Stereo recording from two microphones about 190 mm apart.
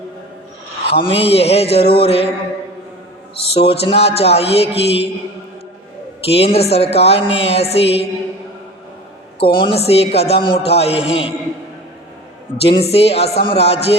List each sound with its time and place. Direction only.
0.9 s a man's voice: 30° left (ahead or behind)
3.5 s a man's voice: 30° left (ahead or behind)
6.2 s a man's voice: 30° left (ahead or behind)
9.4 s a man's voice: 25° left (ahead or behind)
12.6 s a man's voice: 30° left (ahead or behind)